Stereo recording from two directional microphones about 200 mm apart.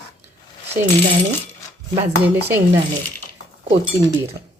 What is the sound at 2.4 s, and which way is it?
Speech, 10° right (ahead or behind).